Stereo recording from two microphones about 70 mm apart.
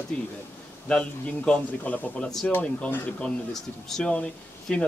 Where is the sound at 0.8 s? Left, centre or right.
Centre.